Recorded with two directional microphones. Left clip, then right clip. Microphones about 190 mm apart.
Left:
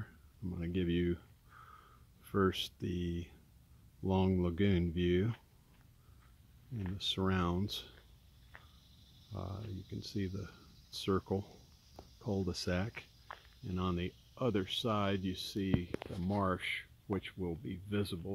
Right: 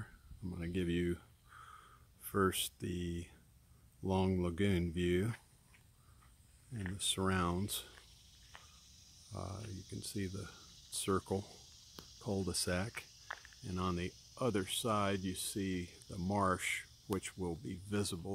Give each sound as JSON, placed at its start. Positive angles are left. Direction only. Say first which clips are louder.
{"t": 0.0, "sound": "a sound", "louder": "left 2 dB", "side_deg": 0}
{"t": 4.0, "sound": "speech", "louder": "left 2 dB", "side_deg": 0}
{"t": 7.0, "sound": "speech", "louder": "even", "side_deg": -5}
{"t": 9.3, "sound": "speech", "louder": "even", "side_deg": -5}